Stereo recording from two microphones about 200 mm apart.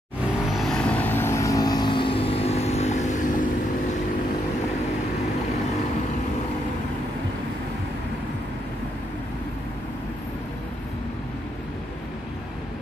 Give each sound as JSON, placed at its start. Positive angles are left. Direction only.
{"t": 0.5, "sound": "vehicle", "side_deg": 0}